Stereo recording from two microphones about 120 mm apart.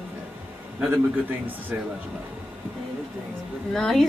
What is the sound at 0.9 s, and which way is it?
Speech, 15° right (ahead or behind).